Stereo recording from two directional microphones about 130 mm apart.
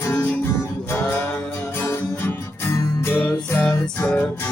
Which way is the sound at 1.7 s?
15° left (ahead or behind).